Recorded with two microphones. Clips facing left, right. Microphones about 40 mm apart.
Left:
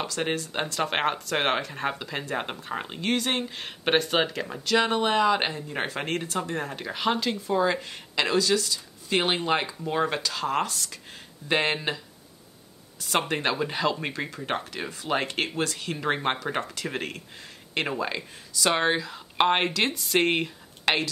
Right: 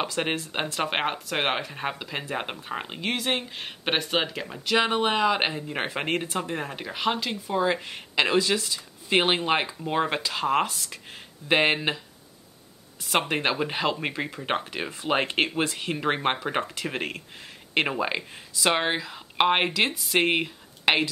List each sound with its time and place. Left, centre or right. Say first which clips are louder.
0.0 s speech: right 1 dB; right
4.7 s speech: even; centre
13.0 s speech: right 1 dB; centre
14.4 s speech: right 3 dB; right